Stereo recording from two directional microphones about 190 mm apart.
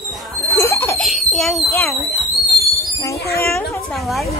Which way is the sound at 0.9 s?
Centre (ahead or behind).